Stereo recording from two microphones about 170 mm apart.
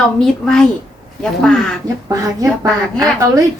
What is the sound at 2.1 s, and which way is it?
Speech, 20° right (ahead or behind).